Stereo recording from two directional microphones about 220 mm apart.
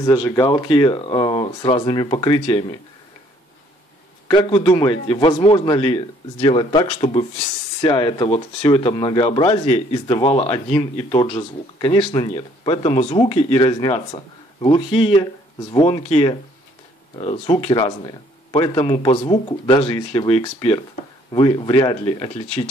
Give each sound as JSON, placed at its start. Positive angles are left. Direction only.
{"t": 0.0, "sound": "speech", "side_deg": 15}
{"t": 4.3, "sound": "speech", "side_deg": 20}